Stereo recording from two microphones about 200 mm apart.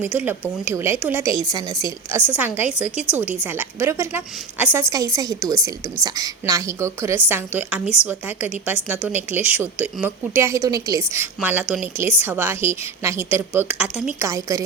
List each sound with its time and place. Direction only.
0.0 s a woman's voice: 10° right (ahead or behind)
14.3 s a woman's voice: 15° right (ahead or behind)